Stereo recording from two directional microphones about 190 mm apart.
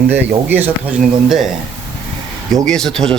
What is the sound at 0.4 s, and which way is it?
Speech, 10° right (ahead or behind).